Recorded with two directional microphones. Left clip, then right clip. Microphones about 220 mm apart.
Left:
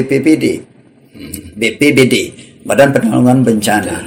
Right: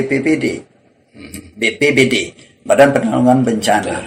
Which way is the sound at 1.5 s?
40° left (ahead or behind).